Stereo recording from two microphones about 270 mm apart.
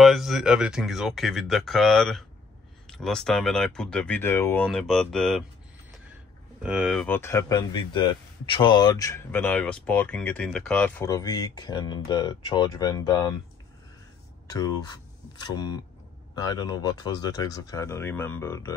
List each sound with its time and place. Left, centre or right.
0.0 s speech: centre
6.6 s speech: centre
14.5 s speech: centre